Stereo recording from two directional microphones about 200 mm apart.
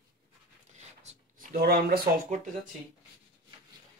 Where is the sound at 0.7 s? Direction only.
35° right (ahead or behind).